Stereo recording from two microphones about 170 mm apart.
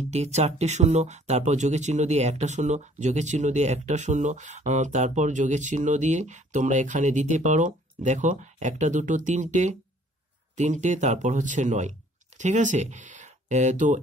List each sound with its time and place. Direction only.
0.1 s speech: 40° right (ahead or behind)